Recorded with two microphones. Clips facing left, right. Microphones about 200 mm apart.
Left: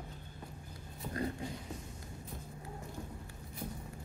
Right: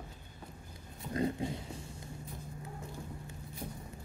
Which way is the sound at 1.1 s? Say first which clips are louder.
Right 5 dB; 20° right (ahead or behind).